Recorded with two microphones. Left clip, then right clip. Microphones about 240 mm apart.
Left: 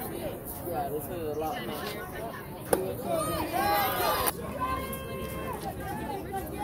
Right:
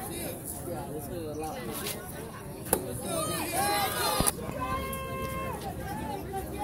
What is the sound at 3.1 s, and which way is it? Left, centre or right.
Run, left.